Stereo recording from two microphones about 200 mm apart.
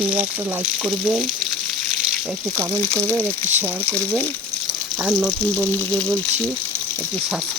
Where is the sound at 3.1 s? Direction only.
15° right (ahead or behind).